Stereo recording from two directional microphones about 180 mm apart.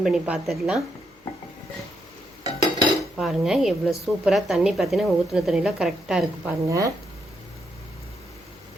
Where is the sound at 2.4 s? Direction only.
20° right (ahead or behind).